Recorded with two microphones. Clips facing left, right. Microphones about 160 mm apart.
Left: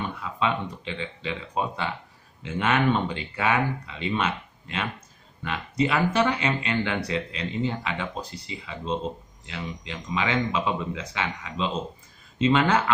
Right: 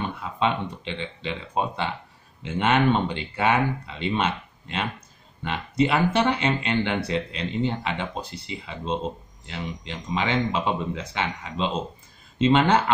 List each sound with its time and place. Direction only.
0.2 s speech: 25° right (ahead or behind)
5.4 s speech: 25° right (ahead or behind)